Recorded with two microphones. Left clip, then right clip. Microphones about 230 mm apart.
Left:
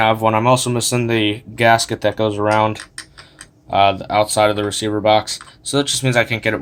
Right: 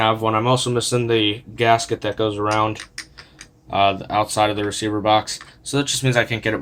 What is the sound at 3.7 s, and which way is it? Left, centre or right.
Speech, left.